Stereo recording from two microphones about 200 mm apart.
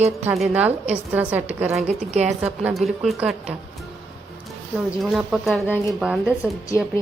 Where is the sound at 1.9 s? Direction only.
30° right (ahead or behind).